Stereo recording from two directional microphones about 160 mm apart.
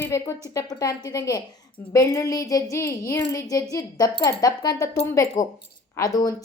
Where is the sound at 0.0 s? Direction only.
15° left (ahead or behind).